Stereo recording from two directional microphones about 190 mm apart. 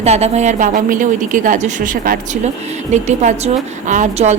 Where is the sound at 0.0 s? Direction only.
35° right (ahead or behind).